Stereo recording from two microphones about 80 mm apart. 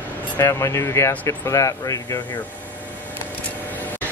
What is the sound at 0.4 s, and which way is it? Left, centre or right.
Speech, left.